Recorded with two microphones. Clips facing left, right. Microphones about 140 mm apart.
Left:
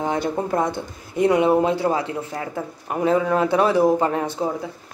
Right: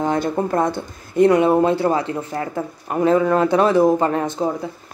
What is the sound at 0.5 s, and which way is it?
Speech, 15° left (ahead or behind).